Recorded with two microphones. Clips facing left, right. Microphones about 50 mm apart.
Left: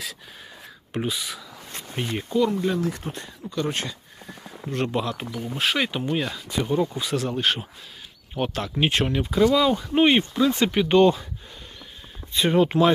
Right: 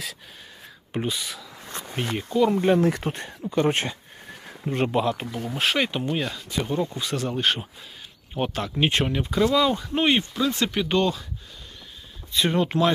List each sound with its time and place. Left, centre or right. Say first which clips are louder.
0.9 s speech: even; centre
2.5 s speech: right 5 dB; right
3.5 s speech: right 5 dB; right
4.7 s speech: right 3 dB; centre
12.4 s speech: left 3 dB; centre